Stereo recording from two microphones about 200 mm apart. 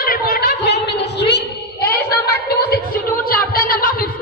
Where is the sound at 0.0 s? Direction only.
50° left (ahead or behind).